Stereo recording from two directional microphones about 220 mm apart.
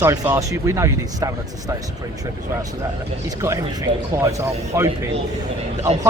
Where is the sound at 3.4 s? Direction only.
15° right (ahead or behind).